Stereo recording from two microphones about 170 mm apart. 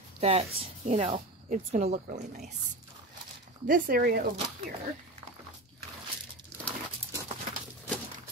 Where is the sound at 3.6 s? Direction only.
60° right (ahead or behind).